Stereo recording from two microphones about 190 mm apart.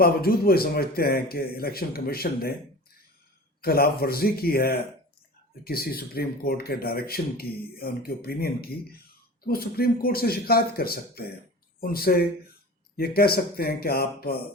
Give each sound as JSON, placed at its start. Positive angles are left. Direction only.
{"t": 0.0, "sound": "speech", "side_deg": 50}
{"t": 3.6, "sound": "speech", "side_deg": 55}